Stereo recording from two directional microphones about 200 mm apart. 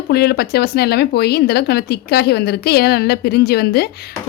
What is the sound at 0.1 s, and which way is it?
A woman's voice, 55° left (ahead or behind).